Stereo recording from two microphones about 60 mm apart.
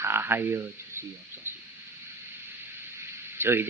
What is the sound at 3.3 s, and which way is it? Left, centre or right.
Speech, right.